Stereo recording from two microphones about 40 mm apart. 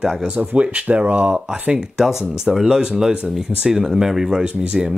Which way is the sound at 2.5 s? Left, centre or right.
Centre.